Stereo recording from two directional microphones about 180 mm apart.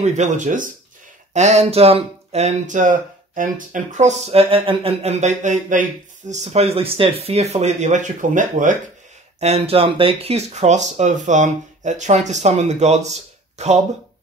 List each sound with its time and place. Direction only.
0.0 s speech: 40° right (ahead or behind)
9.4 s speech: 35° right (ahead or behind)